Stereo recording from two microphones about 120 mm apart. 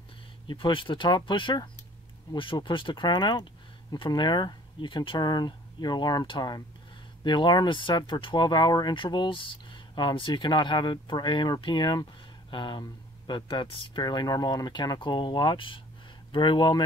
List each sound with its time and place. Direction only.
0.5 s speech: 45° left (ahead or behind)